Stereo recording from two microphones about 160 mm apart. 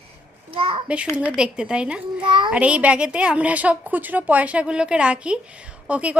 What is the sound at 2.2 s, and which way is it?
Speech, 30° right (ahead or behind).